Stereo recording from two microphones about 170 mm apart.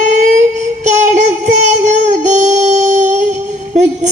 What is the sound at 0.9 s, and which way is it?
Music, 45° right (ahead or behind).